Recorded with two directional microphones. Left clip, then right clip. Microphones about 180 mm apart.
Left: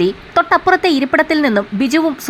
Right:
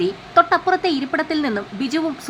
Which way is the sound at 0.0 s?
30° left (ahead or behind).